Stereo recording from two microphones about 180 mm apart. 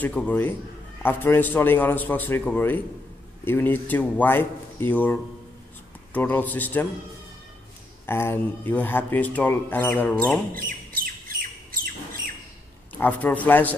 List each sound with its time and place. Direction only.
0.0 s speech: 10° left (ahead or behind)
8.1 s speech: 15° left (ahead or behind)
11.7 s squawk: 50° right (ahead or behind)
13.0 s speech: 10° left (ahead or behind)